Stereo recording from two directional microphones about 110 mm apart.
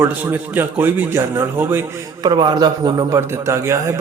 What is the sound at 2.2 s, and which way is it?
A man's voice, 45° right (ahead or behind).